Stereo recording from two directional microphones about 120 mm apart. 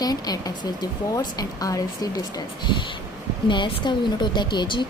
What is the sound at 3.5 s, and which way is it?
Speech, 40° left (ahead or behind).